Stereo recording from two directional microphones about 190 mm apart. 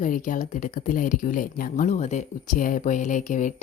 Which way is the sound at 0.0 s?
45° left (ahead or behind).